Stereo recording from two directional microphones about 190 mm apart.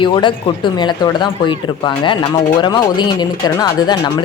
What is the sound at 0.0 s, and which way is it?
Speech, 25° left (ahead or behind).